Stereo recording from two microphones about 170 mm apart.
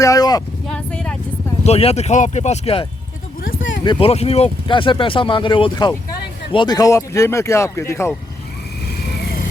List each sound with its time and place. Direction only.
0.0 s speech: 20° left (ahead or behind)
0.7 s speech: 5° left (ahead or behind)
1.6 s speech: 40° left (ahead or behind)
4.0 s speech: 35° left (ahead or behind); by 8.1 s 15° left (ahead or behind)